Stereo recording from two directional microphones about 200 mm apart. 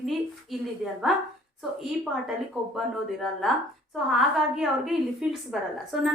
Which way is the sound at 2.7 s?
Centre (ahead or behind).